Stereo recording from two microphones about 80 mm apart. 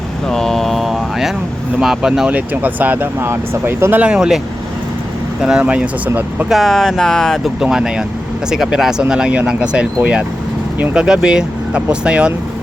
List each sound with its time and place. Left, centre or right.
0.3 s a sound: centre
1.8 s speech: centre
2.3 s speech: right
4.0 s speech: centre
5.4 s speech: centre
6.5 s speech: centre
7.6 s speech: centre